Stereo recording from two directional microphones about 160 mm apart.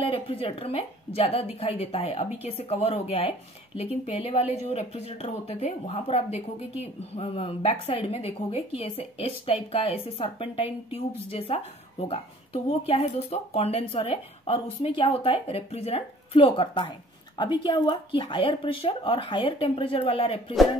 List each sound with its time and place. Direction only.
0.0 s a woman's voice: 35° left (ahead or behind)